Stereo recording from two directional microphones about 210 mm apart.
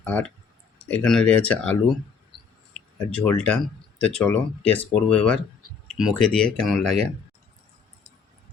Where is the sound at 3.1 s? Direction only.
5° left (ahead or behind).